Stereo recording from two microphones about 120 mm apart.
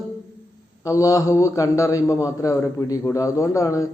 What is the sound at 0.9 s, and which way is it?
Speech, 30° left (ahead or behind).